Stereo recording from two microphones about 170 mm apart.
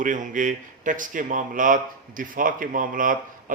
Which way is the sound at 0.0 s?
50° right (ahead or behind).